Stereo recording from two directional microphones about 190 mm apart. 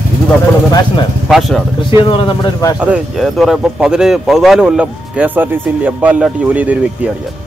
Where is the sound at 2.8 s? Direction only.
5° right (ahead or behind).